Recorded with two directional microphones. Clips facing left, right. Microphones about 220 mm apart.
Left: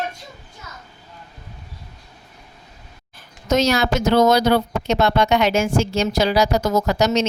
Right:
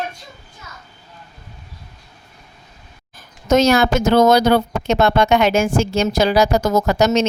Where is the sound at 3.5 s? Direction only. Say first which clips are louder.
Right 4 dB; 50° right (ahead or behind).